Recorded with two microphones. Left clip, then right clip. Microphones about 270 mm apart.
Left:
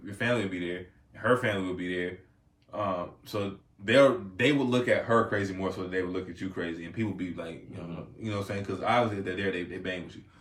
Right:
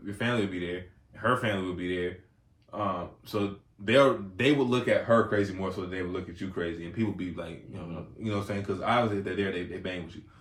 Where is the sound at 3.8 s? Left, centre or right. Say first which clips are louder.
Left 1 dB; centre.